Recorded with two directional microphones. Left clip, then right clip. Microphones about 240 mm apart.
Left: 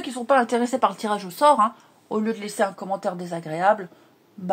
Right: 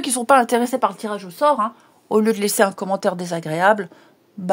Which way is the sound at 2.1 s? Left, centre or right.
Right.